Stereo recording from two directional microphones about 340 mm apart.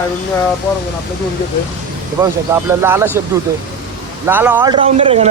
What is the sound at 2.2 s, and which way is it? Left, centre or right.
Speech, centre.